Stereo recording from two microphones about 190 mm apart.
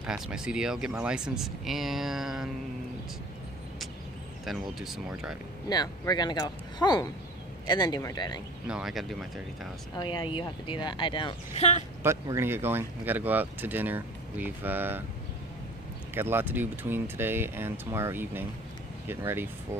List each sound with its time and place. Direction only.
0.0 s speech: 5° right (ahead or behind)
4.5 s speech: centre (ahead or behind)
5.7 s speech: 20° left (ahead or behind)
8.6 s speech: 5° right (ahead or behind)
9.9 s speech: 25° left (ahead or behind)
12.0 s speech: 15° right (ahead or behind)
16.2 s speech: 10° right (ahead or behind)